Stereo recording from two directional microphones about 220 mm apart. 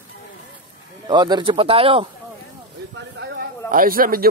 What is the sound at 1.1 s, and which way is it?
Speech, 20° right (ahead or behind).